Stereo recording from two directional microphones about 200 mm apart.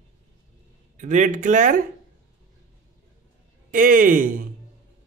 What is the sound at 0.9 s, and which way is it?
Speech, 40° right (ahead or behind).